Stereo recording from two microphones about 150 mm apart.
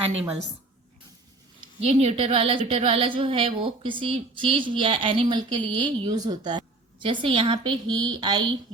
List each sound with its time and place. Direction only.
1.8 s a woman's voice: 45° right (ahead or behind); by 8.5 s 30° right (ahead or behind)